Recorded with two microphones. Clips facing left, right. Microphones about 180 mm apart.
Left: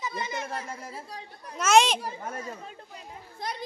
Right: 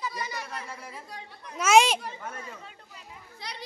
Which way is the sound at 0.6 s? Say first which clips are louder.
Left 3 dB; 45° left (ahead or behind).